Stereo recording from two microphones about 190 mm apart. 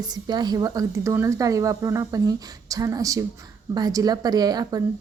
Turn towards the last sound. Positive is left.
turn(degrees=-20)  # may be behind; listen again after turning